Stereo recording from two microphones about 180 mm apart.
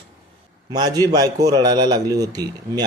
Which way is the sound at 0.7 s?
20° right (ahead or behind).